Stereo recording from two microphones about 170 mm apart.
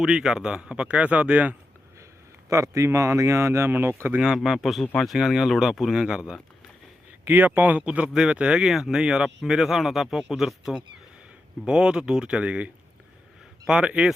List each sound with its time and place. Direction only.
0.0 s speech: 5° right (ahead or behind)
4.2 s speech: 5° right (ahead or behind)